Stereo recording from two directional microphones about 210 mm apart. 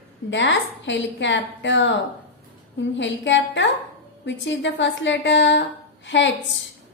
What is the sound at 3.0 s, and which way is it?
A woman's voice, 60° left (ahead or behind).